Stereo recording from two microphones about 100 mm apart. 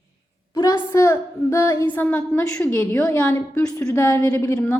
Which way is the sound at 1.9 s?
20° left (ahead or behind).